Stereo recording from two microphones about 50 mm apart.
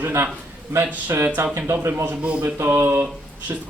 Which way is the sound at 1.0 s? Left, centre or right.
Right.